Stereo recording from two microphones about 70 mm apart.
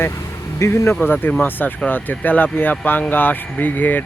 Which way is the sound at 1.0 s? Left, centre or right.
Left.